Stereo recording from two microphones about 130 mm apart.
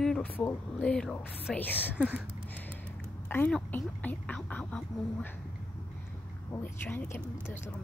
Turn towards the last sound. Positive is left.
turn(degrees=15)  # may be behind; listen again after turning